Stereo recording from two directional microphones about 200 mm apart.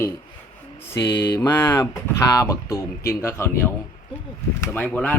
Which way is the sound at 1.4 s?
10° left (ahead or behind).